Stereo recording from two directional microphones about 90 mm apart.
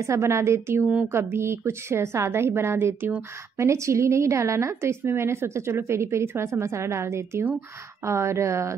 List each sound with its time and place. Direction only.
0.0 s a woman's voice: 30° right (ahead or behind)